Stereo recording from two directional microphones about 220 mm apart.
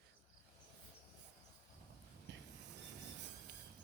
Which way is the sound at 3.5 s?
50° right (ahead or behind).